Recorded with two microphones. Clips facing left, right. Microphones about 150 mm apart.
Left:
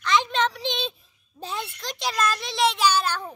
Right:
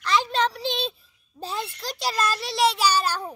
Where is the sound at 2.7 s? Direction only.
40° right (ahead or behind).